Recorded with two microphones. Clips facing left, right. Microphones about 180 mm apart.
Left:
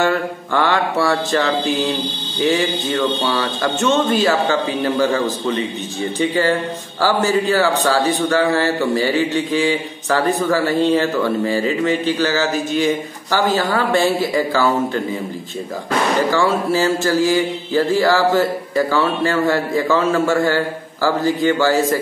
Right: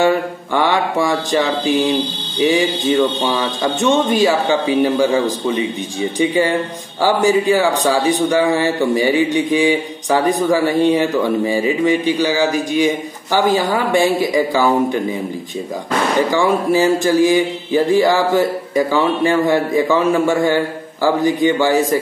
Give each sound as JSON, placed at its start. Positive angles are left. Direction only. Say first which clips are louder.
{"t": 0.0, "sound": "a man's voice", "louder": "right 3 dB", "side_deg": -15}
{"t": 16.3, "sound": "a man's voice", "louder": "right 2 dB", "side_deg": -15}